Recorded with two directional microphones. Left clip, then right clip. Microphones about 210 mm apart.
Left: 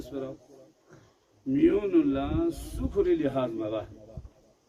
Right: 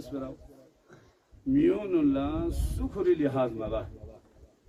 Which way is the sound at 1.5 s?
15° left (ahead or behind).